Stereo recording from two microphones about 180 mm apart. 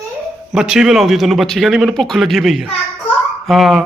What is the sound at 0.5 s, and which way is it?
Speech, 5° right (ahead or behind).